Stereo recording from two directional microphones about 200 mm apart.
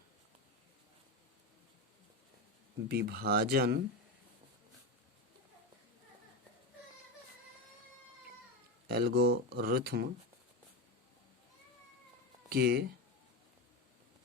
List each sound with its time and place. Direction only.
2.9 s speech: 50° right (ahead or behind)
8.9 s speech: 50° right (ahead or behind)
12.5 s speech: 50° right (ahead or behind)